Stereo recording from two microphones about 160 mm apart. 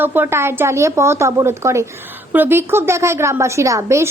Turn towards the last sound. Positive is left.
turn(degrees=-20)  # may be behind; listen again after turning